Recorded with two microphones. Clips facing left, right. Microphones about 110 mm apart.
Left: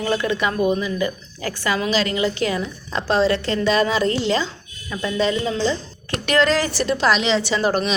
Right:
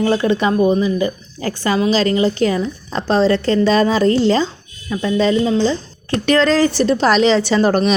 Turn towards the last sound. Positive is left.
turn(degrees=-45)  # may be behind; listen again after turning